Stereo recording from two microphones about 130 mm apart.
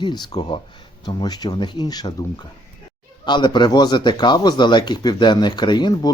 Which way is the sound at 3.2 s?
35° left (ahead or behind).